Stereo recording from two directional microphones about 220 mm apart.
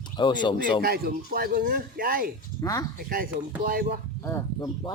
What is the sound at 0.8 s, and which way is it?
Speech, 45° right (ahead or behind).